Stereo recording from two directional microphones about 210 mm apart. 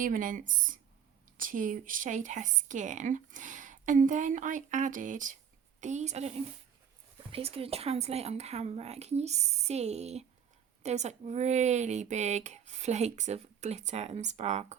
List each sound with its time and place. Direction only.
0.0 s a woman's voice: 40° right (ahead or behind)